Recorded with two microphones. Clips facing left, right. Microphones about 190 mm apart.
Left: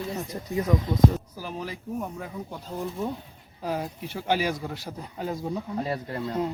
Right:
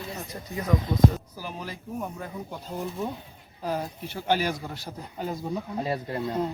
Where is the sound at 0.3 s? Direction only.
10° left (ahead or behind).